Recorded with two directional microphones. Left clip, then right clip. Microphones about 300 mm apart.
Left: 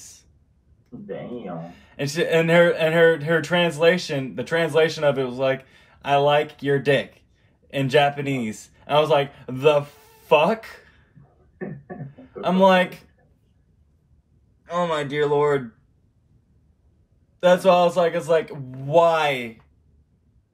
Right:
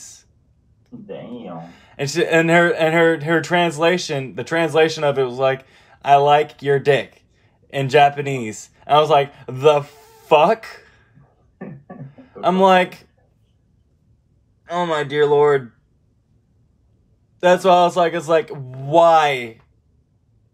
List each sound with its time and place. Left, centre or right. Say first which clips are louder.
0.0 s a sound: right 4 dB; right
1.6 s speech: right 3 dB; right
12.2 s speech: right 3 dB; right
14.6 s speech: right 3 dB; right
17.4 s speech: right 3 dB; right